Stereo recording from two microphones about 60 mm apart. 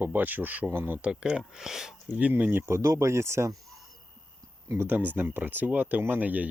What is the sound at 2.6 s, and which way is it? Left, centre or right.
Speech, right.